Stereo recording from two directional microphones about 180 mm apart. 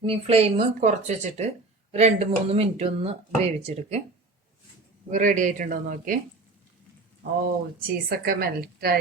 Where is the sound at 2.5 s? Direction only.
35° right (ahead or behind).